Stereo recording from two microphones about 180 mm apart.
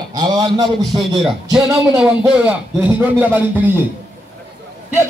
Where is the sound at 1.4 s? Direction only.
15° right (ahead or behind).